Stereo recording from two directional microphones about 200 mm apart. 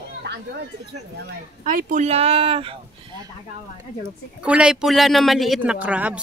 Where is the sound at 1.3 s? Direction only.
45° right (ahead or behind); by 2.7 s 30° right (ahead or behind).